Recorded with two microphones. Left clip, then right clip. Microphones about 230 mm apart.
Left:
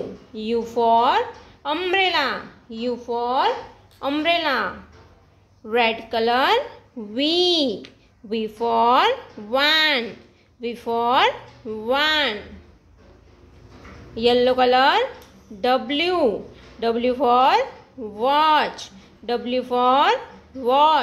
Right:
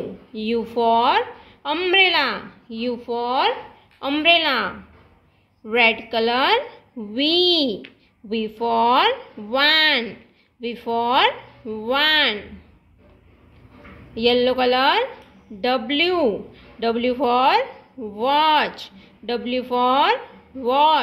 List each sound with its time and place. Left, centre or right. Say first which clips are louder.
0.3 s a woman's voice: even; centre
14.1 s speech: left 1 dB; centre